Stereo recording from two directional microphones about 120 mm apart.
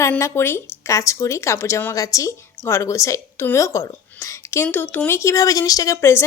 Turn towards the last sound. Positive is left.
turn(degrees=20)  # may be behind; listen again after turning